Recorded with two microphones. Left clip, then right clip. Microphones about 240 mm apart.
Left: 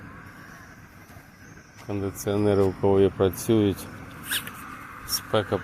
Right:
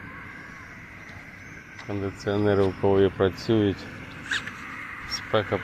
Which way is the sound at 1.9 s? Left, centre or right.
Centre.